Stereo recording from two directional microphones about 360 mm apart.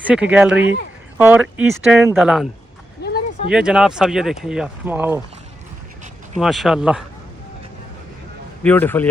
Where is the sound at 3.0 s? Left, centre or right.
Left.